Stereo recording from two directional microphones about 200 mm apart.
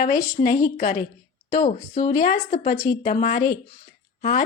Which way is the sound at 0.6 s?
40° left (ahead or behind).